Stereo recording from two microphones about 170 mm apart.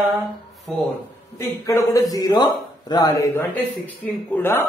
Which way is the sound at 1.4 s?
15° left (ahead or behind).